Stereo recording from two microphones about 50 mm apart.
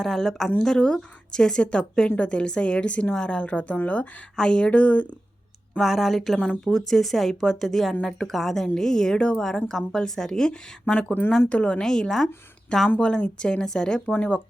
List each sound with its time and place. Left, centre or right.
0.0 s a woman's voice: centre; by 4.0 s left
4.4 s a woman's voice: centre
5.8 s a woman's voice: centre
11.4 s a woman's voice: left
11.8 s a woman's voice: centre
13.0 s a woman's voice: left
14.1 s a woman's voice: left